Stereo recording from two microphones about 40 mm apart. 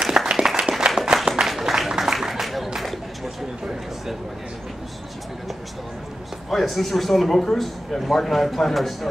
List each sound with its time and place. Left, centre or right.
0.2 s applause: right
1.6 s a sound: centre
6.5 s speech: centre